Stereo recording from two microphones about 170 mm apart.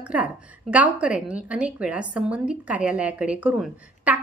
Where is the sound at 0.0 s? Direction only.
10° right (ahead or behind).